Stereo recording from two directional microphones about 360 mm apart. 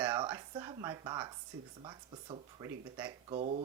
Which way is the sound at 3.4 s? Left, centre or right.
Centre.